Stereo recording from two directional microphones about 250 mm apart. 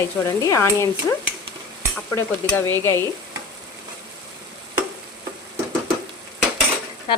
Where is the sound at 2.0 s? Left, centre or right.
Centre.